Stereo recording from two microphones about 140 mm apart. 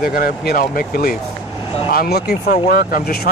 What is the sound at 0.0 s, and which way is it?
Speech, 90° left.